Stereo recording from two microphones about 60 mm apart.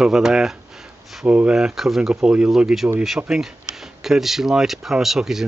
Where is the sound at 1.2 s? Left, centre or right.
Right.